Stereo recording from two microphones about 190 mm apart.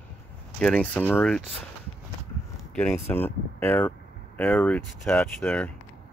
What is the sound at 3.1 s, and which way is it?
Speech, 10° left (ahead or behind).